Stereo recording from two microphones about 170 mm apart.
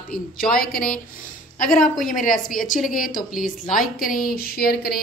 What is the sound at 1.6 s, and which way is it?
Speech, 5° left (ahead or behind).